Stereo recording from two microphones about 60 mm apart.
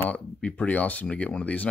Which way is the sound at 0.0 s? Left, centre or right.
Left.